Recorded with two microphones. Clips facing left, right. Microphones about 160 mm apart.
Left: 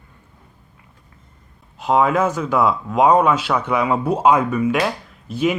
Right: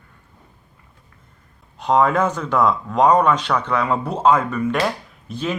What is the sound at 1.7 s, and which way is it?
Speech, 5° left (ahead or behind).